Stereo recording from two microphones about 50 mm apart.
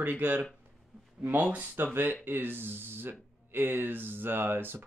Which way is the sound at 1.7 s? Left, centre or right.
Right.